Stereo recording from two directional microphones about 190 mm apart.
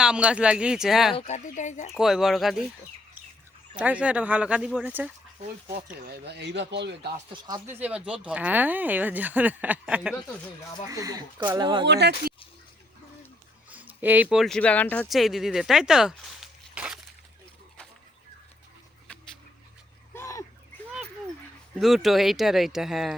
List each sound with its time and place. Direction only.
0.0 s speech: 5° right (ahead or behind)
1.1 s speech: 40° left (ahead or behind)
2.0 s speech: centre (ahead or behind)
3.8 s speech: 5° right (ahead or behind)
6.0 s speech: 55° right (ahead or behind)
7.3 s speech: 20° right (ahead or behind)
7.8 s speech: 5° right (ahead or behind)
10.8 s speech: 20° right (ahead or behind)
11.9 s speech: 60° right (ahead or behind)
13.7 s speech: 10° right (ahead or behind)
20.1 s vehicle: 15° left (ahead or behind)
21.8 s speech: centre (ahead or behind)